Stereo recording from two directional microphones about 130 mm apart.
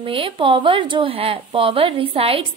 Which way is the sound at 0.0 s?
40° right (ahead or behind).